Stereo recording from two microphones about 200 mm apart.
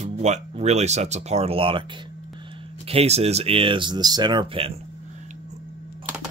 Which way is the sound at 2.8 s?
30° right (ahead or behind).